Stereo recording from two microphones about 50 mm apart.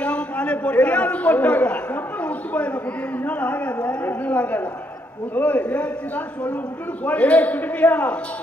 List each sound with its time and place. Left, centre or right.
0.0 s a man's voice: left